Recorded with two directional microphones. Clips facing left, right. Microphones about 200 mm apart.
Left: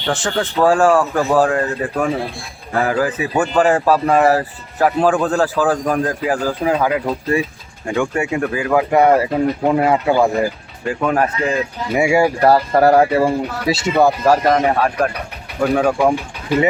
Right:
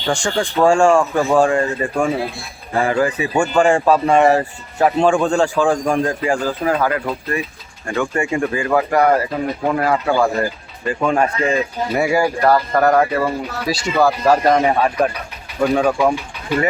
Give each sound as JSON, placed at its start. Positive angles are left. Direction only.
{"t": 0.1, "sound": "speech", "side_deg": 5}
{"t": 7.1, "sound": "speech", "side_deg": 30}
{"t": 7.9, "sound": "speech", "side_deg": 10}
{"t": 8.9, "sound": "speech", "side_deg": 25}
{"t": 11.9, "sound": "speech", "side_deg": 20}
{"t": 14.3, "sound": "speech", "side_deg": 0}